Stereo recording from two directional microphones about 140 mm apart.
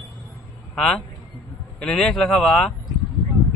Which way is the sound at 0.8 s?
5° left (ahead or behind).